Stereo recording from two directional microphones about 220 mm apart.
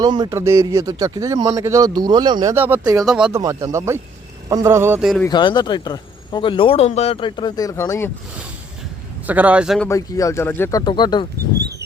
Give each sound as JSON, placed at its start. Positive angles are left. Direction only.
{"t": 0.0, "sound": "a man's voice", "side_deg": -20}
{"t": 5.2, "sound": "speech", "side_deg": 20}
{"t": 9.2, "sound": "a man's voice", "side_deg": -5}
{"t": 9.9, "sound": "speech", "side_deg": 15}